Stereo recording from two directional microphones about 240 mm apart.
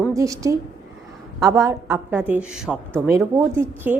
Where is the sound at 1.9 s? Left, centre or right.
Centre.